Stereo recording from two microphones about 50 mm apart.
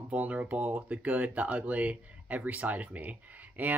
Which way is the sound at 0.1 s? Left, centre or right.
Right.